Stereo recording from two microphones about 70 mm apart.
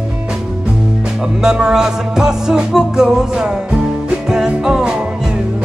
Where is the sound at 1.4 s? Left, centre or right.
Centre.